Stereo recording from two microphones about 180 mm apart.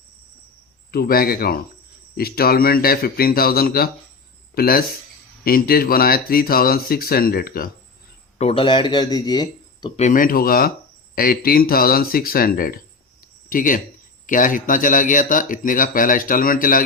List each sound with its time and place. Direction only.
0.9 s speech: 55° left (ahead or behind)
8.4 s speech: 30° left (ahead or behind)
10.0 s speech: 45° left (ahead or behind)